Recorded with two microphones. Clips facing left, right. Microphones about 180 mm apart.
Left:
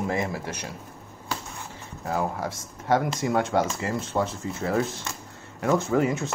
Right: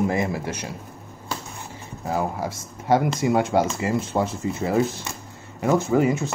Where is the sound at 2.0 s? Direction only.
5° right (ahead or behind).